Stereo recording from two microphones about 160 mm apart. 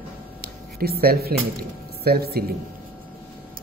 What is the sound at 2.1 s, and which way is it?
Speech, 75° right (ahead or behind).